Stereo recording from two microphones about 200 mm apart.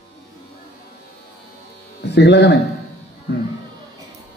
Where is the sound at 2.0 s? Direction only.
60° left (ahead or behind).